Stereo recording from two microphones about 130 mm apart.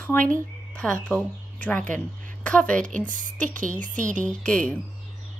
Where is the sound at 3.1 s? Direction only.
85° right.